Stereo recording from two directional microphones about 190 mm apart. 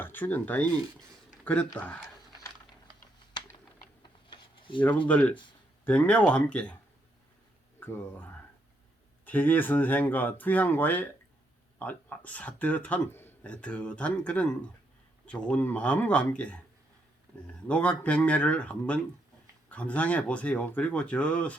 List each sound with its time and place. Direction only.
0.0 s speech: 10° left (ahead or behind)
4.0 s a sound: 25° left (ahead or behind)
5.0 s speech: 10° left (ahead or behind)
7.8 s speech: 10° left (ahead or behind)